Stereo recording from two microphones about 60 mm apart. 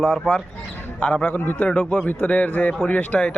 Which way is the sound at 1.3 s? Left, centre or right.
Left.